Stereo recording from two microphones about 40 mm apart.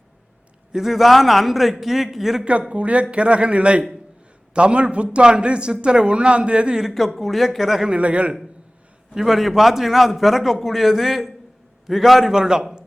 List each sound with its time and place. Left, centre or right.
0.7 s a man's voice: centre
2.4 s a man's voice: right
6.9 s a man's voice: centre
7.9 s a man's voice: right
9.1 s a man's voice: centre
12.3 s a man's voice: centre